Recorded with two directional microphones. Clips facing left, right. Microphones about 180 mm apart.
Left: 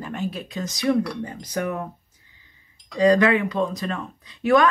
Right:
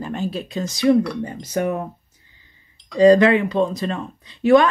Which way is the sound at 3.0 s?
30° right (ahead or behind).